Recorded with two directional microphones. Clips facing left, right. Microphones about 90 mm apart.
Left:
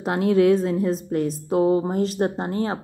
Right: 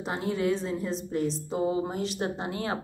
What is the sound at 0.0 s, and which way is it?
A woman's voice, 65° left (ahead or behind).